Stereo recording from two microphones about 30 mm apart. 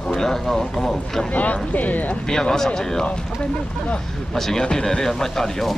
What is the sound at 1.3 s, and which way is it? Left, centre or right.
Speech, left.